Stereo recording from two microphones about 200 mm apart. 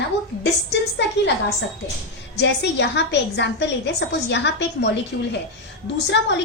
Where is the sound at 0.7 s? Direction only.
60° left (ahead or behind).